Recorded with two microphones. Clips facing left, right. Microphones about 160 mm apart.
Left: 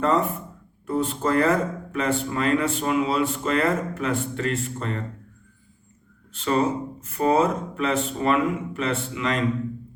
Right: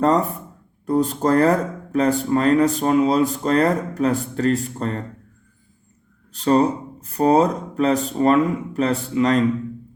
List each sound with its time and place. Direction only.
0.9 s speech: 40° right (ahead or behind)
6.3 s speech: 40° right (ahead or behind)